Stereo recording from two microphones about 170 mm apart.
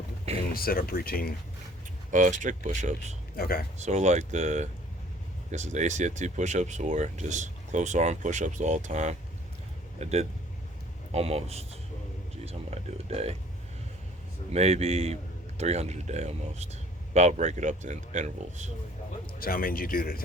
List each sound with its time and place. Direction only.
0.5 s speech: 60° left (ahead or behind)
2.0 s speech: 50° right (ahead or behind)
3.3 s speech: 60° left (ahead or behind)
3.8 s a man's voice: 40° right (ahead or behind)
12.5 s a sound: 40° right (ahead or behind)
14.5 s a man's voice: 40° right (ahead or behind)
19.4 s speech: 60° left (ahead or behind)